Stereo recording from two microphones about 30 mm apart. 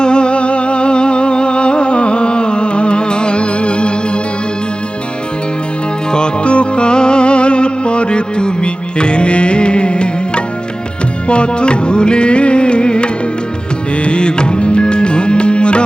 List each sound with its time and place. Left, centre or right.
0.0 s music: left
6.1 s music: left
6.4 s music: left